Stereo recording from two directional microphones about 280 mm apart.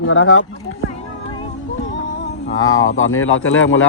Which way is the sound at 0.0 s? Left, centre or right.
Left.